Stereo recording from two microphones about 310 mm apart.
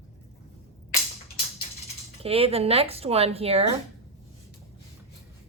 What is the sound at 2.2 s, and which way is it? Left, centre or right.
Speech, centre.